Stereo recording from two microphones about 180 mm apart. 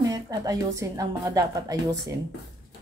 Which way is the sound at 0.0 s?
20° right (ahead or behind).